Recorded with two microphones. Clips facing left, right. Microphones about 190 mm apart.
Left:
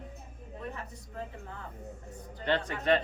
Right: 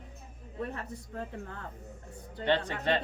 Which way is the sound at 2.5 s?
30° right (ahead or behind).